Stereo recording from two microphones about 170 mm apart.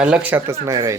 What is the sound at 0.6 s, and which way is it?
Speech, 20° right (ahead or behind).